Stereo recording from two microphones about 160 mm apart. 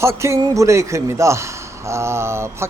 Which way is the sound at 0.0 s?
15° right (ahead or behind).